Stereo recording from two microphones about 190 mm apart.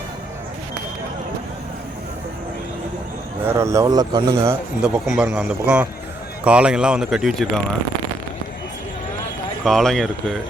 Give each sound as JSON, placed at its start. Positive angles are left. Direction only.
{"t": 3.4, "sound": "speech", "side_deg": -15}
{"t": 4.8, "sound": "speech", "side_deg": -5}
{"t": 9.6, "sound": "speech", "side_deg": 0}